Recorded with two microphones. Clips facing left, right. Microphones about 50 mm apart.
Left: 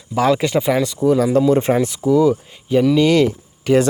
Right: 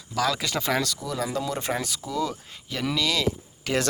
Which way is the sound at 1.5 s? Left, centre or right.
Left.